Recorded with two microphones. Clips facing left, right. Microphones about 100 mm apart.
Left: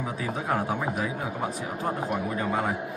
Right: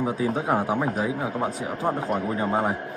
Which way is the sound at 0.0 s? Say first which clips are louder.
Right 6 dB; 25° right (ahead or behind).